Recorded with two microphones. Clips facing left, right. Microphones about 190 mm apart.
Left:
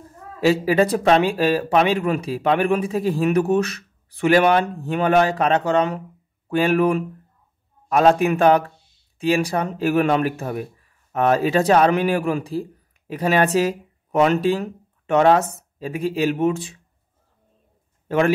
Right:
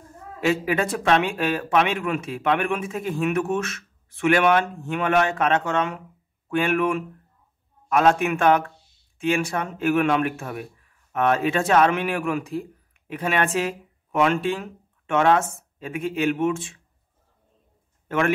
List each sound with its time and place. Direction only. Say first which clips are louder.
0.4 s speech: left 5 dB; 35° left (ahead or behind)
18.0 s speech: left 4 dB; 35° left (ahead or behind)